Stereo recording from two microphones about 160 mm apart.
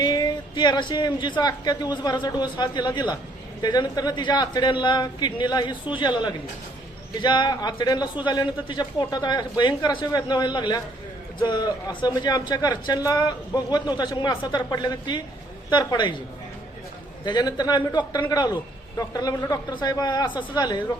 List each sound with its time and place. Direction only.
0.0 s speech: 25° left (ahead or behind)
17.2 s speech: 25° left (ahead or behind)